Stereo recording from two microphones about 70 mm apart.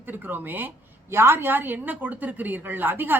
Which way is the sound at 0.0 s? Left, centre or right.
Right.